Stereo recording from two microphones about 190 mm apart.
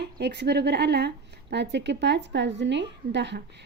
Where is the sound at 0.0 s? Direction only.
60° right (ahead or behind).